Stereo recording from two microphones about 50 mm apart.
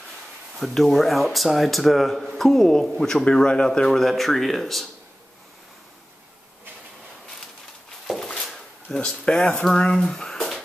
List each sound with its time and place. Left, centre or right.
0.6 s a man's voice: centre
8.5 s a sound: centre
9.7 s speech: centre